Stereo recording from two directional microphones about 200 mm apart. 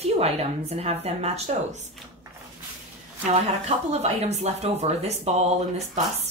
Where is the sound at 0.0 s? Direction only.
30° right (ahead or behind).